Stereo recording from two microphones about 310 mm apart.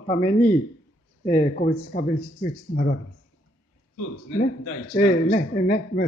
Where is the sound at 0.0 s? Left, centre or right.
Centre.